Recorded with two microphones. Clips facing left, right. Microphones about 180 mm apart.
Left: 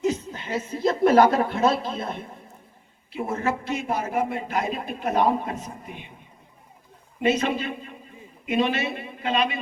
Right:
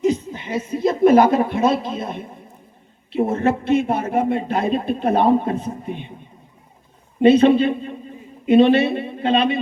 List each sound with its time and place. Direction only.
0.0 s a woman's voice: 15° right (ahead or behind)
3.4 s speech: 60° right (ahead or behind)
3.8 s a man's voice: 25° right (ahead or behind)
7.2 s a man's voice: 30° right (ahead or behind)